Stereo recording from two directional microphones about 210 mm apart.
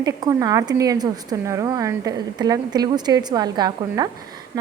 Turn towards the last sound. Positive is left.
turn(degrees=-20)  # may be behind; listen again after turning